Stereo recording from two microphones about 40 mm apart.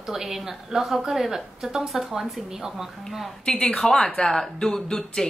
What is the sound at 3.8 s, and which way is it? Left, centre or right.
Speech, centre.